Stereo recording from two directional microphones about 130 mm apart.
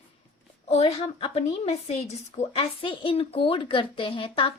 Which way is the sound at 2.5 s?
45° left (ahead or behind).